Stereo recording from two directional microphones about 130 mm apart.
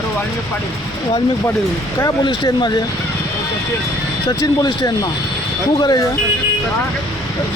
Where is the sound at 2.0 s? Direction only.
35° left (ahead or behind).